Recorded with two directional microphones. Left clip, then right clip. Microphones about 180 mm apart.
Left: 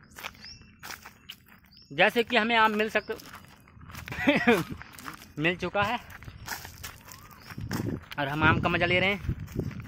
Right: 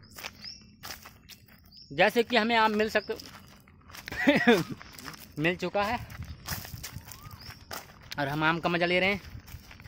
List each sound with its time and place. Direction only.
2.0 s speech: 5° right (ahead or behind)
5.1 s a sound: 5° right (ahead or behind)
5.4 s speech: 5° right (ahead or behind)
6.1 s a sound: 40° right (ahead or behind)
7.6 s walk: 50° right (ahead or behind)
8.1 s speech: 10° right (ahead or behind)